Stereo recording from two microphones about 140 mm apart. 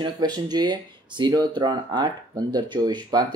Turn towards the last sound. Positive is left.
turn(degrees=-30)  # may be behind; listen again after turning